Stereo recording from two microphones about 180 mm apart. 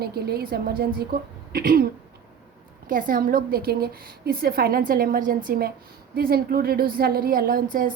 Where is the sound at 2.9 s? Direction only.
50° right (ahead or behind).